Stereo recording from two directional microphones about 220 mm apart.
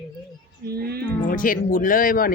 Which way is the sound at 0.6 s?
45° right (ahead or behind).